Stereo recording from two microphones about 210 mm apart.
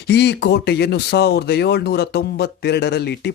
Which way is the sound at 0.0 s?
55° left (ahead or behind).